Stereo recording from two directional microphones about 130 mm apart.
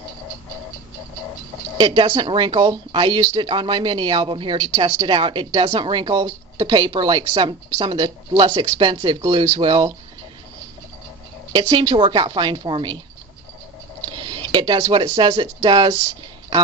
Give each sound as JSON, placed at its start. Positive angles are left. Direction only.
{"t": 1.8, "sound": "speech", "side_deg": -40}
{"t": 11.5, "sound": "speech", "side_deg": -35}
{"t": 14.1, "sound": "speech", "side_deg": -35}